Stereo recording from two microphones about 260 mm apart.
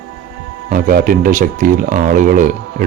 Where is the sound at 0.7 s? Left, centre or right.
Right.